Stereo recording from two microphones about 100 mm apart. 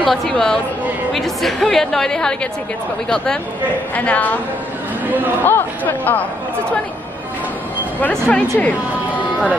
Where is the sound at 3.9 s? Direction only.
15° left (ahead or behind).